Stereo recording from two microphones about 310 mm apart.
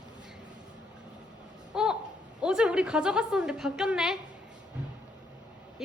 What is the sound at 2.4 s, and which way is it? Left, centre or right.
Speech, centre.